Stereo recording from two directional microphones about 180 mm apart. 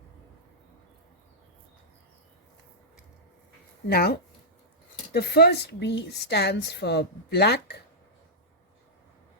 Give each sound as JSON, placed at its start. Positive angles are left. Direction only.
{"t": 3.8, "sound": "speech", "side_deg": 60}